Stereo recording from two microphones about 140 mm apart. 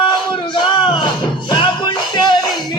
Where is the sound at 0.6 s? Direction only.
35° left (ahead or behind).